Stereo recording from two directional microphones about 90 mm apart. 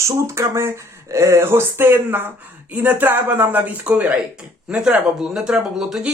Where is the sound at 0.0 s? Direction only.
30° right (ahead or behind).